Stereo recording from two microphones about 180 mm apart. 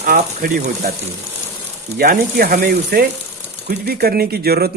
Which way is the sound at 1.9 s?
55° right (ahead or behind).